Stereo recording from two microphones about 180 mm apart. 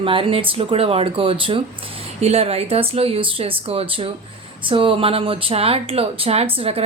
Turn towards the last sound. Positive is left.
turn(degrees=-35)  # may be behind; listen again after turning